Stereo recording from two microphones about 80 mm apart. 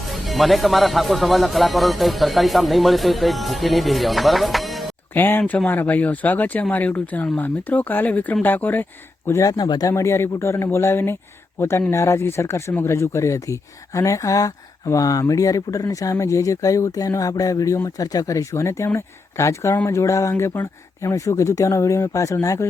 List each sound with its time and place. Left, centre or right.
0.0 s speech: centre
5.1 s speech: left
9.4 s speech: left
9.9 s speech: left